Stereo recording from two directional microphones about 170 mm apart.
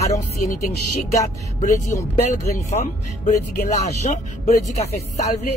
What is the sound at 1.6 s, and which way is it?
Speech, 45° left (ahead or behind).